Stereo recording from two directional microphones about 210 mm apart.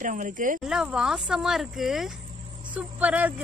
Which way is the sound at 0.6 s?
Centre (ahead or behind).